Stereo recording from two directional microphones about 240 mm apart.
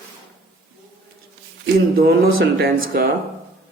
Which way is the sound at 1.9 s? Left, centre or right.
Right.